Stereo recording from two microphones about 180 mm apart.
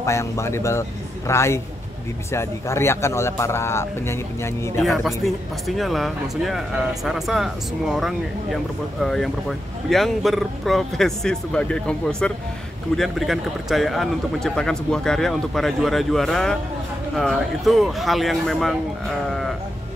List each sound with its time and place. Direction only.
0.0 s a man's voice: 15° left (ahead or behind)
4.8 s speech: centre (ahead or behind)